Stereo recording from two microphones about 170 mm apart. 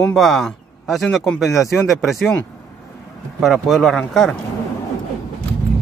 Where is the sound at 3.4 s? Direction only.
Centre (ahead or behind).